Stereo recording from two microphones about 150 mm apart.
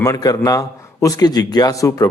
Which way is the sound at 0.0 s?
25° left (ahead or behind).